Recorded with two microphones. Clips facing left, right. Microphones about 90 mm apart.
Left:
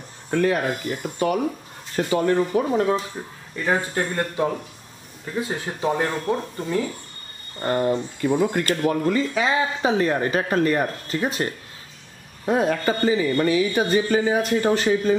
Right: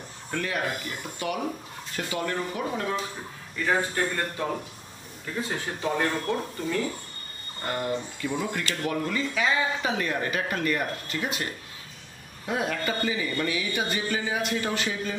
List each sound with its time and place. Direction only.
0.3 s speech: 40° left (ahead or behind)
5.5 s speech: 20° left (ahead or behind)
7.6 s speech: 35° left (ahead or behind)
12.4 s speech: 40° left (ahead or behind)